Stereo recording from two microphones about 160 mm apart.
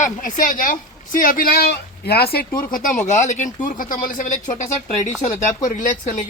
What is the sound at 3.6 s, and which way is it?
Speech, 60° left (ahead or behind).